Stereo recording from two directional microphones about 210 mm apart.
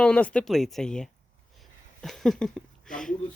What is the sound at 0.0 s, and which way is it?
Speech, 5° left (ahead or behind).